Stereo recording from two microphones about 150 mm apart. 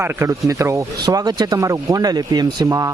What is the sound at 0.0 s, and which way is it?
Speech, 20° right (ahead or behind).